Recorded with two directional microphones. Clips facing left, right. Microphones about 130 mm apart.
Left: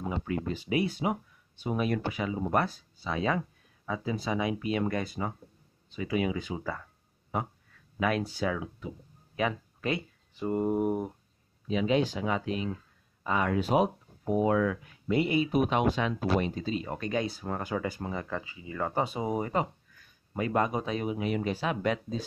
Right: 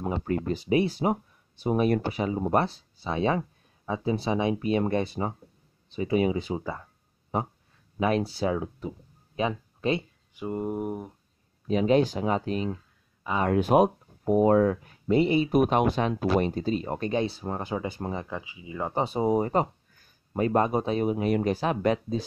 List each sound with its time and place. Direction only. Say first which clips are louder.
0.1 s speech: right 5 dB; 40° right (ahead or behind)
10.5 s speech: left 3 dB; centre (ahead or behind)
11.6 s speech: right 5 dB; 45° right (ahead or behind)
13.4 s speech: right 5 dB; 50° right (ahead or behind); by 15.5 s 30° right (ahead or behind)
15.5 s speech: right 4 dB; 50° right (ahead or behind); by 19.0 s 15° right (ahead or behind)
19.0 s speech: right 7 dB; 35° right (ahead or behind)